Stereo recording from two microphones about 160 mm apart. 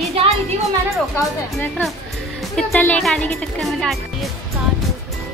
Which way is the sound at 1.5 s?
5° left (ahead or behind).